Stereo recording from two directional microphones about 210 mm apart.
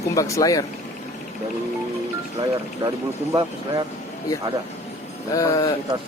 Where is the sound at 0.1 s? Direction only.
15° left (ahead or behind).